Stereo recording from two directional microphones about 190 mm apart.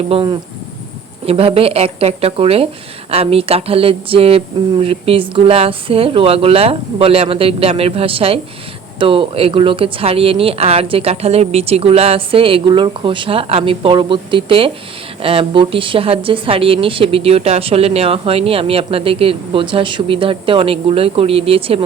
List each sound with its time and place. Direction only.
0.1 s a woman's voice: 30° right (ahead or behind)